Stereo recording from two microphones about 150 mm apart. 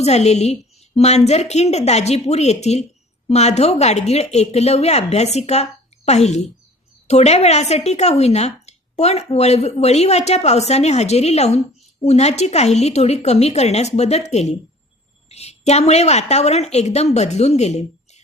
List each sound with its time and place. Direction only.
0.0 s a woman's voice: 45° left (ahead or behind)